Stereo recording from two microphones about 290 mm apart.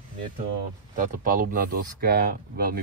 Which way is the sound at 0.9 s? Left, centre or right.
Right.